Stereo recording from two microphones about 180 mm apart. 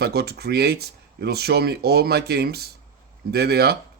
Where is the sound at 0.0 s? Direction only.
65° right (ahead or behind).